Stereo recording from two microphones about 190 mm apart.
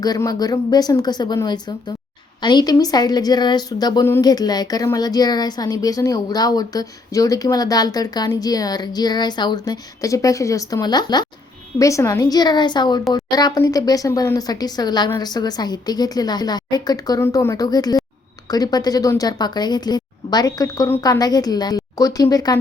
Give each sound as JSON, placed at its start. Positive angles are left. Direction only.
{"t": 0.0, "sound": "a woman's voice", "side_deg": 20}